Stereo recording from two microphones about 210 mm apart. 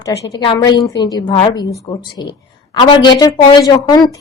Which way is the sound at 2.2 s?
20° left (ahead or behind).